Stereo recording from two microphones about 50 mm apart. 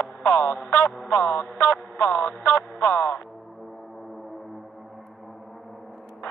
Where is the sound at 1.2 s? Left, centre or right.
Left.